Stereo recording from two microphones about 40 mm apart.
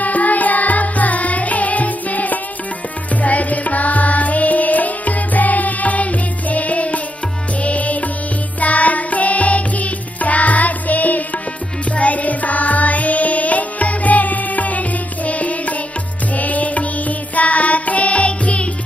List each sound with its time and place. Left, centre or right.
0.0 s music: left